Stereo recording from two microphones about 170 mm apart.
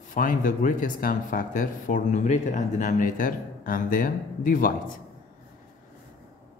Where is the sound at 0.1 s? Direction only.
50° left (ahead or behind).